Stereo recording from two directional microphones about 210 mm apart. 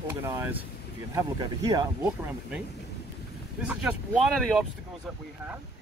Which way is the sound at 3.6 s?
5° right (ahead or behind).